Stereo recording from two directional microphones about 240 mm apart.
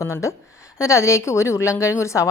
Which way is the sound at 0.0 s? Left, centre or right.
Centre.